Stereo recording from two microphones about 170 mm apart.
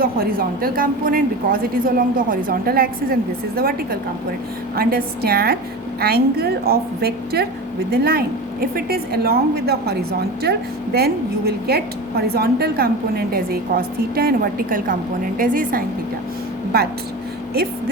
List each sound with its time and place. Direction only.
0.0 s a woman's voice: 60° right (ahead or behind)
16.7 s a woman's voice: 65° right (ahead or behind)